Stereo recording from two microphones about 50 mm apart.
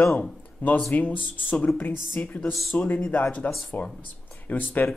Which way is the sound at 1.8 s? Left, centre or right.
Left.